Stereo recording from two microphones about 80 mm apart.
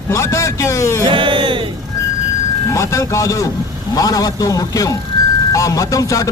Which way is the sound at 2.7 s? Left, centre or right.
Left.